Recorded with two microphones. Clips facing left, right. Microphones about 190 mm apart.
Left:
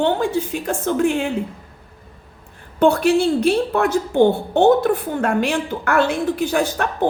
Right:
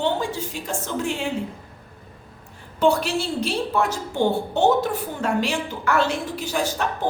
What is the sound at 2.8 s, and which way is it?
A woman's voice, 55° left (ahead or behind).